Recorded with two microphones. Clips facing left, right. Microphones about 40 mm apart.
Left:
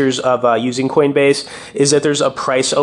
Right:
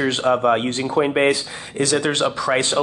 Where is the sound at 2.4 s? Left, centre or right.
Centre.